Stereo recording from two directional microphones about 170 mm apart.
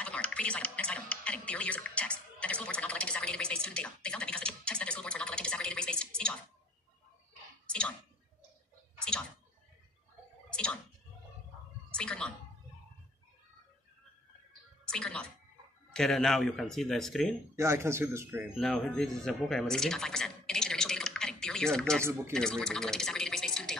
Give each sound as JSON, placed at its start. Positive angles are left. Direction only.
{"t": 0.0, "sound": "music", "side_deg": 5}
{"t": 10.5, "sound": "a sound", "side_deg": 5}
{"t": 11.9, "sound": "a sound", "side_deg": 5}
{"t": 14.9, "sound": "music", "side_deg": 5}
{"t": 15.9, "sound": "speech", "side_deg": 0}
{"t": 17.6, "sound": "speech", "side_deg": -15}
{"t": 18.6, "sound": "speech", "side_deg": 5}